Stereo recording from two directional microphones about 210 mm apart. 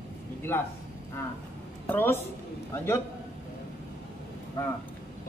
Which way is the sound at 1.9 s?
10° left (ahead or behind).